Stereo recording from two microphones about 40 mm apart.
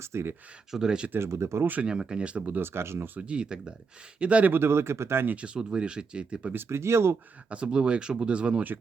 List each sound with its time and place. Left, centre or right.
0.0 s speech: right
0.7 s speech: centre
1.1 s speech: right
1.9 s speech: centre
2.6 s speech: right
3.2 s speech: right
4.2 s speech: right
4.5 s speech: right
5.5 s speech: right
6.5 s speech: right
7.5 s speech: right